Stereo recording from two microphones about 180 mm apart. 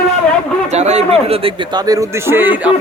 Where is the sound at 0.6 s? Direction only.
40° right (ahead or behind).